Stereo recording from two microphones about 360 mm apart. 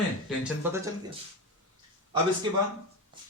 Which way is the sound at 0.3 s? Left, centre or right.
Centre.